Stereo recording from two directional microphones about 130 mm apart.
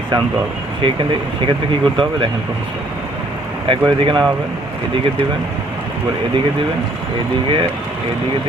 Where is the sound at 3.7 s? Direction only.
40° right (ahead or behind).